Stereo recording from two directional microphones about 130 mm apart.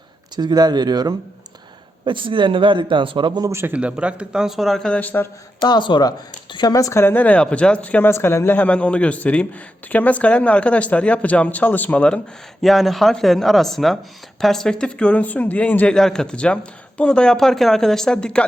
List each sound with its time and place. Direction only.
0.3 s a man's voice: 30° right (ahead or behind)
3.5 s a man's voice: 20° right (ahead or behind); by 5.3 s 15° left (ahead or behind)
5.5 s speech: 35° left (ahead or behind); by 18.4 s 5° left (ahead or behind)